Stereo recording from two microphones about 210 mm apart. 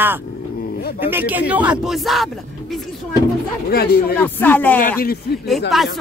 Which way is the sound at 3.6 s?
45° left (ahead or behind).